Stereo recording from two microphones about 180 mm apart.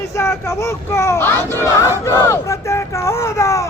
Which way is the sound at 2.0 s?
15° left (ahead or behind).